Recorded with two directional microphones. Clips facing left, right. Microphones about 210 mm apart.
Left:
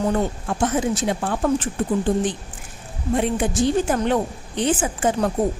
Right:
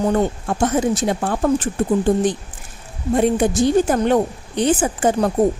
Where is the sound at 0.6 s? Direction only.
40° right (ahead or behind).